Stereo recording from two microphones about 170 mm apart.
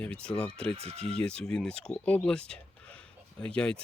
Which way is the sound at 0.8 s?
35° right (ahead or behind).